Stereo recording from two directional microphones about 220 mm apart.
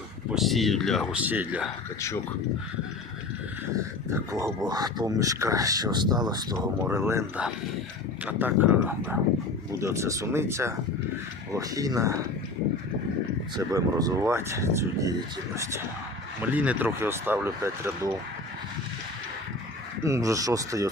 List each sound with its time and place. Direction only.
0.3 s speech: centre (ahead or behind)
2.0 s speech: 15° left (ahead or behind)
4.1 s speech: 10° right (ahead or behind)
13.6 s speech: 15° right (ahead or behind)
16.4 s speech: 5° right (ahead or behind)
20.1 s speech: 15° right (ahead or behind)